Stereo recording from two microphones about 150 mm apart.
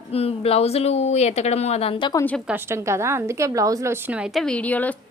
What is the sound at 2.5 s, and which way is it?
A woman's voice, 15° right (ahead or behind).